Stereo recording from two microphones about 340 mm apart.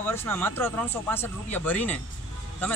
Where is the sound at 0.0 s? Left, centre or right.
Centre.